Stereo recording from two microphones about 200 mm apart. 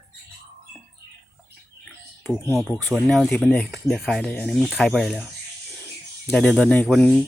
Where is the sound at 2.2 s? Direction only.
Centre (ahead or behind).